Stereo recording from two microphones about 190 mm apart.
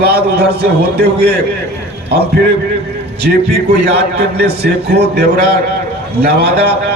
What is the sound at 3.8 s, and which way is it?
A man's voice, 60° right (ahead or behind).